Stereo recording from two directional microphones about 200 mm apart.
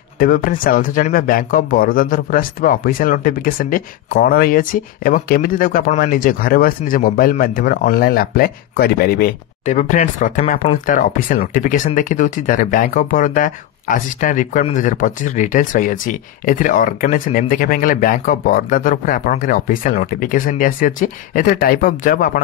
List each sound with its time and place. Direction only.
0.2 s speech: 45° left (ahead or behind)